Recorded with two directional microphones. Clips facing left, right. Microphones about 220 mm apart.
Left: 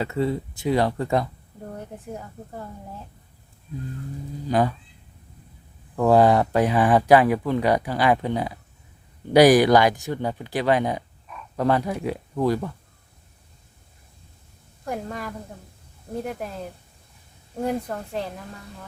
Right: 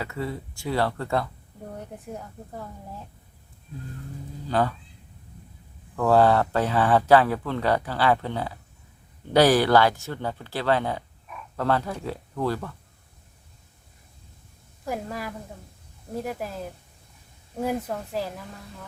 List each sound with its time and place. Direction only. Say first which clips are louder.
0.0 s speech: left 7 dB; 25° left (ahead or behind)
2.1 s speech: left 1 dB; centre (ahead or behind)
4.4 s speech: left 3 dB; 15° left (ahead or behind)
6.0 s speech: left 2 dB; 15° left (ahead or behind)
14.8 s speech: left 1 dB; 5° right (ahead or behind)
17.6 s speech: left 1 dB; 5° right (ahead or behind)